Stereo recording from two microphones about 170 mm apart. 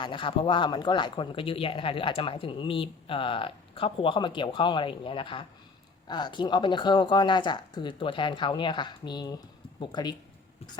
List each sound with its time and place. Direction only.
0.0 s speech: 30° left (ahead or behind)